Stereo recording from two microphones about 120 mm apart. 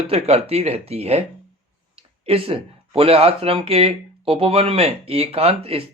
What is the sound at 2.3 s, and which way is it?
Speech, 50° right (ahead or behind).